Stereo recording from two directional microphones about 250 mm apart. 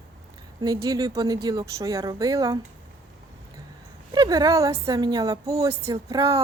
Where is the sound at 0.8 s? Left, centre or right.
Centre.